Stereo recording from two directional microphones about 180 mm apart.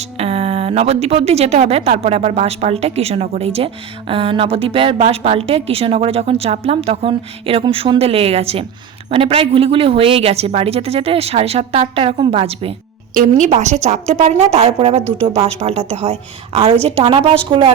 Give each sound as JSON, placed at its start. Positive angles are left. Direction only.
{"t": 0.2, "sound": "a woman's voice", "side_deg": -35}
{"t": 13.1, "sound": "a woman's voice", "side_deg": -45}